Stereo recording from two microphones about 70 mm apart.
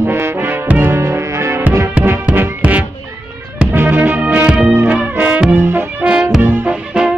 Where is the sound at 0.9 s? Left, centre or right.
Right.